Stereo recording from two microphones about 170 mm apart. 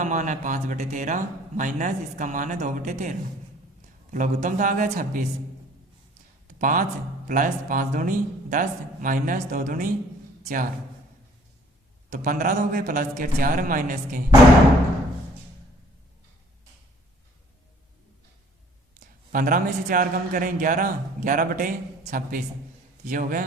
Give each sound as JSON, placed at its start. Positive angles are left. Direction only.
{"t": 0.0, "sound": "a man's voice", "side_deg": -45}
{"t": 6.6, "sound": "a man's voice", "side_deg": -50}
{"t": 12.1, "sound": "a man's voice", "side_deg": -50}
{"t": 18.9, "sound": "a man's voice", "side_deg": -55}